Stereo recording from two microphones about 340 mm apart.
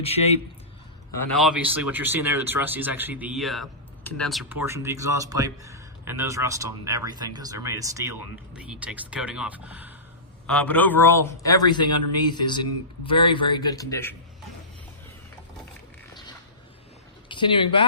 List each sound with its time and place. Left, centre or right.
0.0 s a man's voice: centre
1.3 s a man's voice: centre
17.2 s speech: centre